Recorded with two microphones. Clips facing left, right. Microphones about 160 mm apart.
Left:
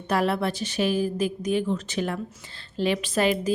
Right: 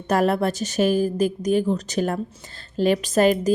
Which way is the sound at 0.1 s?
45° right (ahead or behind).